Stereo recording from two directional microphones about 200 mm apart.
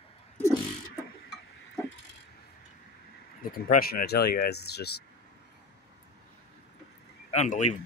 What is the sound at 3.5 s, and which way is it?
Speech, 45° left (ahead or behind).